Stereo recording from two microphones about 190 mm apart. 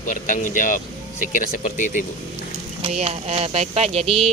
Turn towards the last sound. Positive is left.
turn(degrees=-30)  # may be behind; listen again after turning